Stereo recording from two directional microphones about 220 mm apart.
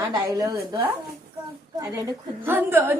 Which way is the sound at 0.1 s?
15° right (ahead or behind).